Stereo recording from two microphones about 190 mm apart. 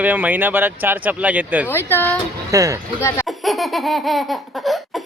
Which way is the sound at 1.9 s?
10° left (ahead or behind).